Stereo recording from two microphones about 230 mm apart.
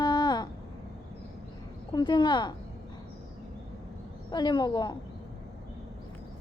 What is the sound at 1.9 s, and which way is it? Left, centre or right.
Speech, centre.